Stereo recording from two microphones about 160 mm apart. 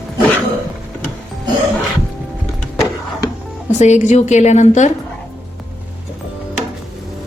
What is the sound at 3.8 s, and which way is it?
A woman's voice, 45° left (ahead or behind).